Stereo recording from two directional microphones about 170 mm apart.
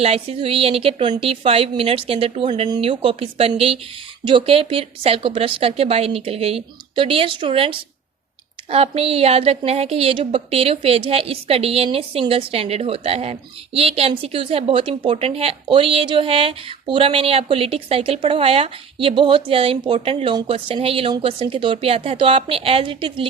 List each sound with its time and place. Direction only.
0.0 s a woman's voice: 35° right (ahead or behind)